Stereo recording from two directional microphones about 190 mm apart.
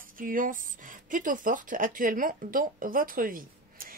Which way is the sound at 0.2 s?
45° right (ahead or behind).